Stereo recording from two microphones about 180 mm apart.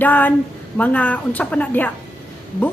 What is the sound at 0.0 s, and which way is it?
A woman's voice, 10° left (ahead or behind).